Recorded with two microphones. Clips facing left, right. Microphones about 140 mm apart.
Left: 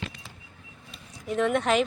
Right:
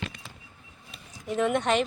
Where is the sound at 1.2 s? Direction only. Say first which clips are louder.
Left 1 dB; centre (ahead or behind).